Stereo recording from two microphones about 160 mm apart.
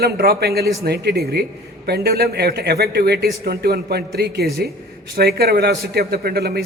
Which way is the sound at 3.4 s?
80° right.